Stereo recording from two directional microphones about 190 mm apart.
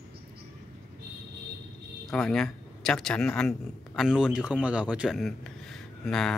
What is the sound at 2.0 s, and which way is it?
Speech, 5° left (ahead or behind).